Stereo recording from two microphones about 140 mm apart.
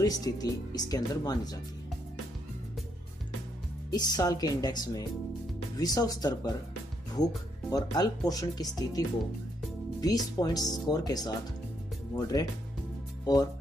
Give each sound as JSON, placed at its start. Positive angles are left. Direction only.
{"t": 0.0, "sound": "speech", "side_deg": 25}
{"t": 3.9, "sound": "speech", "side_deg": 30}